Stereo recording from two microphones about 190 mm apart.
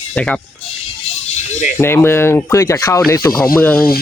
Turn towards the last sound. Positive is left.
turn(degrees=10)  # may be behind; listen again after turning